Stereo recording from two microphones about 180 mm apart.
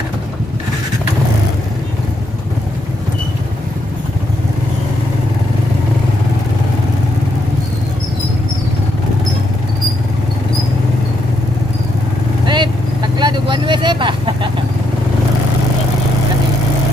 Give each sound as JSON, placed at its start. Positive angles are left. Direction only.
{"t": 12.4, "sound": "vehicle", "side_deg": -25}